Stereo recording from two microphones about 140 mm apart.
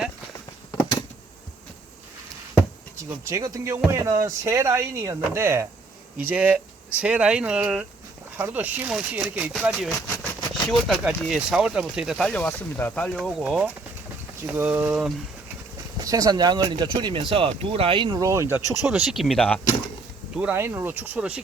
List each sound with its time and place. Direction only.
0.8 s a sound: 30° left (ahead or behind)
3.1 s speech: 20° right (ahead or behind); by 13.1 s 10° left (ahead or behind)
13.1 s speech: centre (ahead or behind)
16.0 s speech: 25° right (ahead or behind)
18.9 s speech: 5° right (ahead or behind)
20.3 s speech: 10° right (ahead or behind)